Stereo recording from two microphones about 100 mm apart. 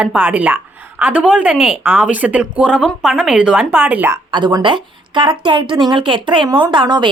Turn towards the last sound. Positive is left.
turn(degrees=-50)  # may be behind; listen again after turning